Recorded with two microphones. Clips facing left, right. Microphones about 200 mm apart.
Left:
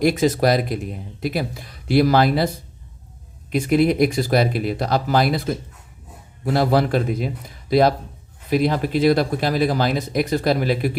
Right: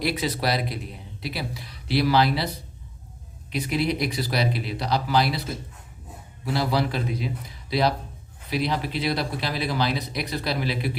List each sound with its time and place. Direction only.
0.0 s speech: 45° left (ahead or behind)